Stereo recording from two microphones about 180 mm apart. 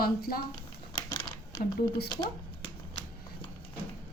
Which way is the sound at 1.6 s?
40° left (ahead or behind).